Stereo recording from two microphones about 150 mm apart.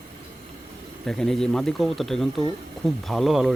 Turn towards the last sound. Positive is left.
turn(degrees=0)  # may be behind; listen again after turning